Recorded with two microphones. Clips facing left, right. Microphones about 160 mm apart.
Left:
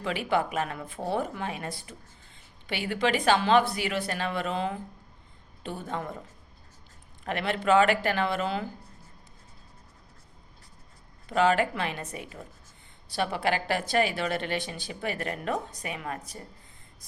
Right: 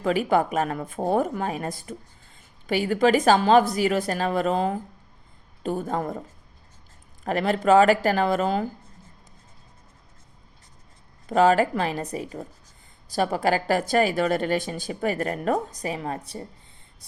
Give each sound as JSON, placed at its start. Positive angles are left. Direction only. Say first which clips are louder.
{"t": 0.0, "sound": "speech", "louder": "right 6 dB", "side_deg": -45}
{"t": 7.3, "sound": "speech", "louder": "right 5 dB", "side_deg": -40}
{"t": 11.3, "sound": "speech", "louder": "right 5 dB", "side_deg": -40}